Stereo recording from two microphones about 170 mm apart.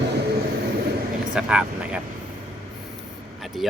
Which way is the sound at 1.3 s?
5° right (ahead or behind).